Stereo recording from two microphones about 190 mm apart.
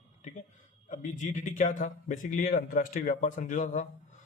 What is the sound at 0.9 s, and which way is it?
A man's voice, 40° left (ahead or behind).